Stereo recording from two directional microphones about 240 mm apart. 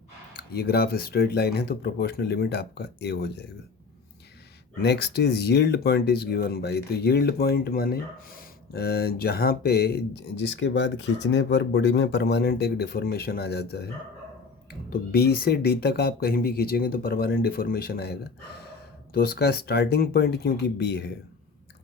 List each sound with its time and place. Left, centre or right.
0.3 s speech: left
4.8 s speech: left
14.8 s speech: left